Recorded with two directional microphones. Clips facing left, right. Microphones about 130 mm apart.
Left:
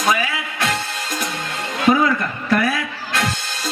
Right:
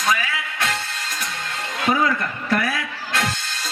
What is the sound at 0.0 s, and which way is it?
Music, 15° left (ahead or behind).